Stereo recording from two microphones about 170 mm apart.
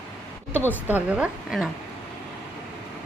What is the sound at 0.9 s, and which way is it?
Speech, 10° right (ahead or behind).